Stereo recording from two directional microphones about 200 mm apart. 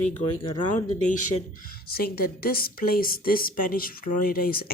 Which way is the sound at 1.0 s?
40° left (ahead or behind).